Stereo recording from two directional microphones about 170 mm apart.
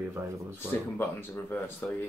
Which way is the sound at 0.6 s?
15° left (ahead or behind).